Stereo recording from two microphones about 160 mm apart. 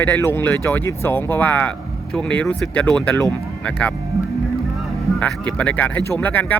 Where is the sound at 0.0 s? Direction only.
10° left (ahead or behind).